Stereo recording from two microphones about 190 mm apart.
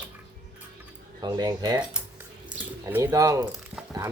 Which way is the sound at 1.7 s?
5° right (ahead or behind).